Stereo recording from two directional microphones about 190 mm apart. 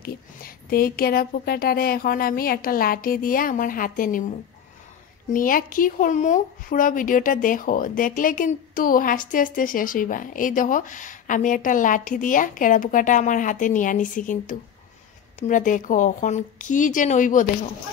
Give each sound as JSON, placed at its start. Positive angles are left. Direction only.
{"t": 0.0, "sound": "speech", "side_deg": 50}
{"t": 5.3, "sound": "speech", "side_deg": 45}